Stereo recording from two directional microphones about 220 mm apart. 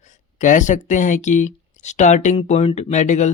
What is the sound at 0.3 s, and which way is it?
Speech, 35° left (ahead or behind).